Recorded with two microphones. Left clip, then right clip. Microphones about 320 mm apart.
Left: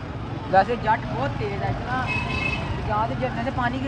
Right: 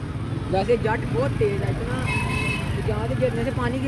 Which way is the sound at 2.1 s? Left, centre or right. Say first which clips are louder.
Even; right.